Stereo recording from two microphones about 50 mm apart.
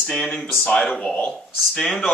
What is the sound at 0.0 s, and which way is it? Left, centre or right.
Speech, centre.